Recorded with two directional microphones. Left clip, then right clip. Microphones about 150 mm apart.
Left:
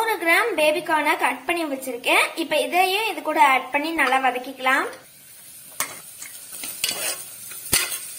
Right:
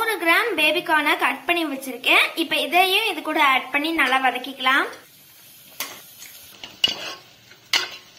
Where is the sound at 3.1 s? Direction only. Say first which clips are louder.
Left 2 dB; 80° right.